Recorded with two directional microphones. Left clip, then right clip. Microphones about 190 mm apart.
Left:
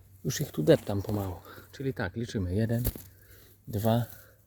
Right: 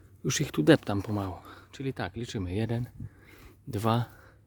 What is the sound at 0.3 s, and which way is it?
Speech, 45° right (ahead or behind).